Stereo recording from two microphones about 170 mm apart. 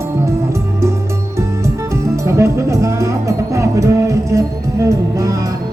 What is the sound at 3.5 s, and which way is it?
Music, 20° right (ahead or behind).